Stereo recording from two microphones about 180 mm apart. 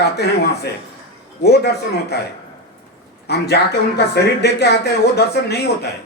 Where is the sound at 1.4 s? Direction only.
65° left (ahead or behind).